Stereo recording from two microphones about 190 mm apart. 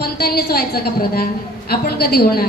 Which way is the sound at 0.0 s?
55° left (ahead or behind).